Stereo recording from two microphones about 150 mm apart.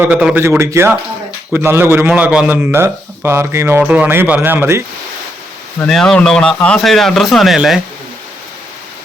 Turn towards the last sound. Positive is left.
turn(degrees=0)  # may be behind; listen again after turning